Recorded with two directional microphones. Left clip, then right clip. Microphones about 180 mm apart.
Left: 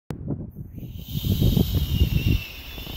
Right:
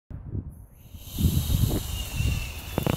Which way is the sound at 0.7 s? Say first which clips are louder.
Even; centre (ahead or behind).